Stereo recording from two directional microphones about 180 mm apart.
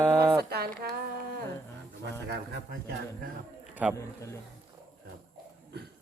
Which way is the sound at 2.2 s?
65° right (ahead or behind).